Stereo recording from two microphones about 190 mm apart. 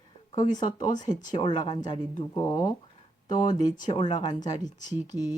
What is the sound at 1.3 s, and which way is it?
Speech, 25° left (ahead or behind).